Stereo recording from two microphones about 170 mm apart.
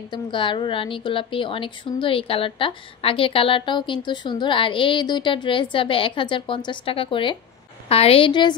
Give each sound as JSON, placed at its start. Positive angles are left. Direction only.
{"t": 0.1, "sound": "a woman's voice", "side_deg": 30}